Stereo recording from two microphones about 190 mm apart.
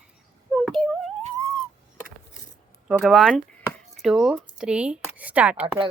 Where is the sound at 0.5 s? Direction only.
5° left (ahead or behind).